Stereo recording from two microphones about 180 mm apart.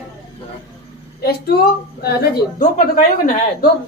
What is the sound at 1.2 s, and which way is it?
A woman's voice, 60° left (ahead or behind).